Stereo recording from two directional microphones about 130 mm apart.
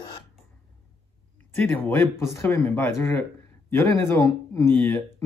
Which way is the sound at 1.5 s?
15° left (ahead or behind).